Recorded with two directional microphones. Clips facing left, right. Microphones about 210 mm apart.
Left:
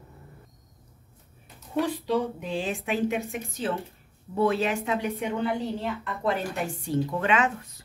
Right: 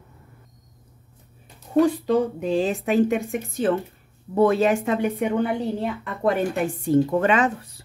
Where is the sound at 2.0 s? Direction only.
40° right (ahead or behind).